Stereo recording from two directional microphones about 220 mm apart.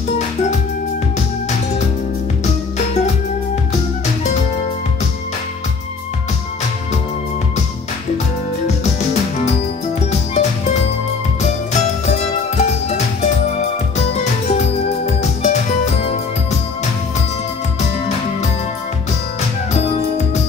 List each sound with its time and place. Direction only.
8.6 s music: 30° left (ahead or behind)
12.1 s music: 30° left (ahead or behind)
17.7 s music: 30° left (ahead or behind)